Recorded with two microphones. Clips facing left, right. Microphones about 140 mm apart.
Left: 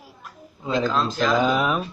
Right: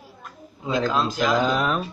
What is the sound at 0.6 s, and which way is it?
Speech, 5° right (ahead or behind).